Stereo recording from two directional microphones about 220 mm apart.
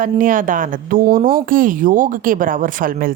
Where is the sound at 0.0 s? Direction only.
40° right (ahead or behind).